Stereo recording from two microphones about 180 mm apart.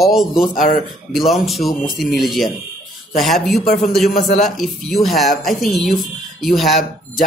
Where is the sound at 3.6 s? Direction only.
40° left (ahead or behind).